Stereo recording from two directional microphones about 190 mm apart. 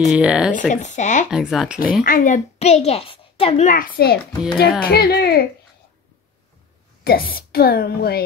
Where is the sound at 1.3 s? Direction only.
Centre (ahead or behind).